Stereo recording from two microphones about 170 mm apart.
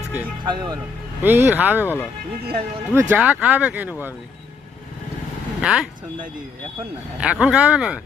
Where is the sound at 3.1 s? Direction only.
10° right (ahead or behind).